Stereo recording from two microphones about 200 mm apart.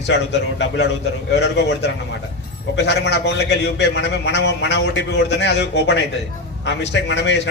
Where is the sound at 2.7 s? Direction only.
60° left (ahead or behind).